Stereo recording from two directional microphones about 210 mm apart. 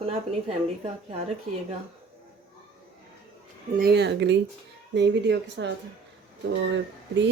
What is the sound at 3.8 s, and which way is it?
Speech, 50° right (ahead or behind).